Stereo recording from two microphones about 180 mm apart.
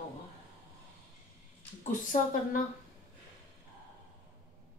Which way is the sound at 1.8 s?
45° left (ahead or behind).